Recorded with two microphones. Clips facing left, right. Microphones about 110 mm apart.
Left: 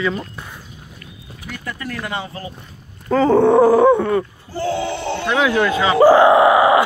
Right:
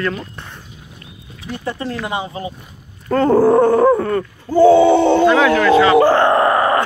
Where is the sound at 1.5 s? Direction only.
25° right (ahead or behind).